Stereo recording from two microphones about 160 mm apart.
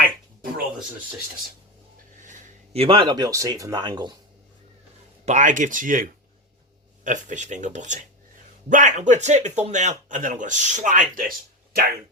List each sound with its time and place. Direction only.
2.2 s a sound: 50° right (ahead or behind)
2.8 s speech: 35° right (ahead or behind)
5.2 s speech: 50° right (ahead or behind)